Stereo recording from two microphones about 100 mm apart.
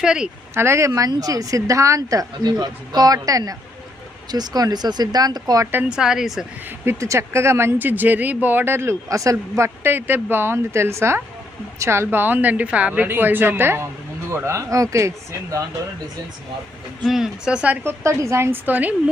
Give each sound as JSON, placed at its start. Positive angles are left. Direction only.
{"t": 0.0, "sound": "speech", "side_deg": -5}
{"t": 0.5, "sound": "a woman's voice", "side_deg": -25}
{"t": 5.9, "sound": "speech", "side_deg": -5}
{"t": 6.7, "sound": "speech", "side_deg": -25}
{"t": 17.0, "sound": "speech", "side_deg": 0}
{"t": 17.8, "sound": "speech", "side_deg": -30}